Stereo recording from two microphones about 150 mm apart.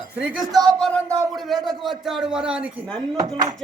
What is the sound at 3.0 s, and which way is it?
Dishes, 25° right (ahead or behind).